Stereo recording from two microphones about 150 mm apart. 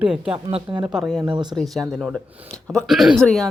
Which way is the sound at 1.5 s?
Centre (ahead or behind).